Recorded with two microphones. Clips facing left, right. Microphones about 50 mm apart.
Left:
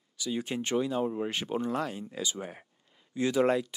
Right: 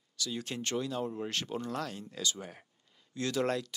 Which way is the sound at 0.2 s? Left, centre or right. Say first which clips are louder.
Left 4 dB; centre.